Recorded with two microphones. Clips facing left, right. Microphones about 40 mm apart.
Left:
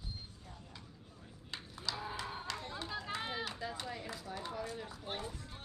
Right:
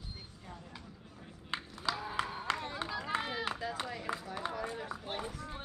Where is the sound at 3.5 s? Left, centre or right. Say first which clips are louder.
Right 4 dB; right.